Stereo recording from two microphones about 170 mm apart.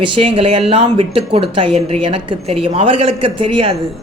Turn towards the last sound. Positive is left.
turn(degrees=-30)  # may be behind; listen again after turning